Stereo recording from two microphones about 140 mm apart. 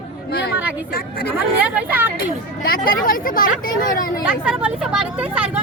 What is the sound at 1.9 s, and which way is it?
Speech, 15° right (ahead or behind).